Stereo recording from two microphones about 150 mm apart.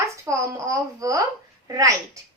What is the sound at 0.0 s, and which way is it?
A woman's voice, 20° right (ahead or behind).